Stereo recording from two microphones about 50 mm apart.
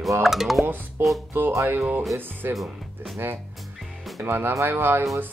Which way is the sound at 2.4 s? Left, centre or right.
Right.